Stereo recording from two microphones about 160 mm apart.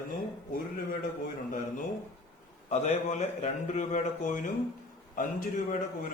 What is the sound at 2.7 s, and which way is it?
A man's voice, 45° left (ahead or behind).